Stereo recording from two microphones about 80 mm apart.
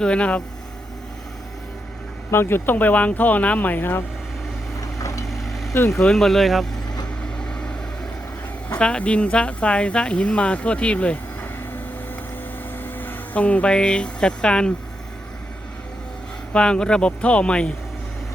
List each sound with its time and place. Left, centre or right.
0.0 s speech: centre
2.3 s speech: left
5.3 s vehicle: centre
5.7 s speech: left
6.0 s speech: centre
7.3 s vehicle: centre
8.8 s speech: centre
12.7 s speech: left
16.5 s speech: centre